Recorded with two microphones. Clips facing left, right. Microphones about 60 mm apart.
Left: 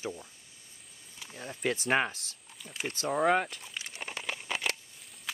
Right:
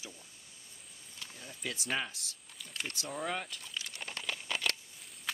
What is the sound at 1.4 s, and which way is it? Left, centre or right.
Speech, left.